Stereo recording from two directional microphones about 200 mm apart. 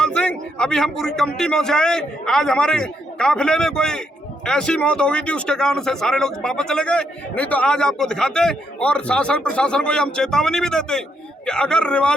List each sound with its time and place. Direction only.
0.0 s speech: 5° left (ahead or behind)